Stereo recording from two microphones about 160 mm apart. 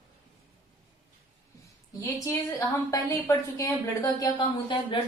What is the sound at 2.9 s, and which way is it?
A woman's voice, 20° left (ahead or behind).